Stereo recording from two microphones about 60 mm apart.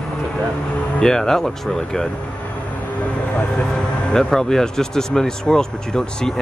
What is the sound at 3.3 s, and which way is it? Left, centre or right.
Speech, centre.